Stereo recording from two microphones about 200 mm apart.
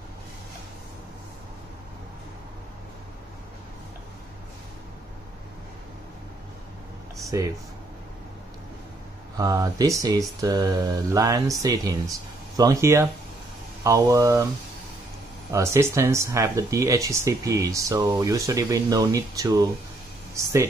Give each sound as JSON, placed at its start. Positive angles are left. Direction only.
{"t": 7.2, "sound": "speech", "side_deg": -15}
{"t": 9.4, "sound": "speech", "side_deg": -15}
{"t": 15.5, "sound": "speech", "side_deg": -15}